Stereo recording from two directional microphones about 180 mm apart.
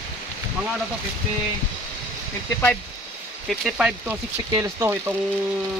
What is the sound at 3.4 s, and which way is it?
Speech, 5° right (ahead or behind).